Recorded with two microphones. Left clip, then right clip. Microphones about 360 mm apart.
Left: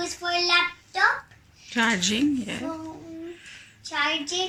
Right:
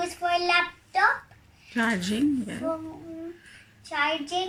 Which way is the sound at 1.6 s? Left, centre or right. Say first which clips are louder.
Left 4 dB; centre.